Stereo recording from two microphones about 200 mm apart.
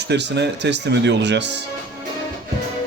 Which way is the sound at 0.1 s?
60° right (ahead or behind).